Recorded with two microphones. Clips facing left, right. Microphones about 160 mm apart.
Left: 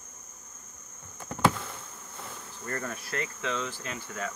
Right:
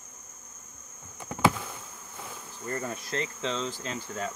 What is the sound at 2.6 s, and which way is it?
Cricket, 15° right (ahead or behind).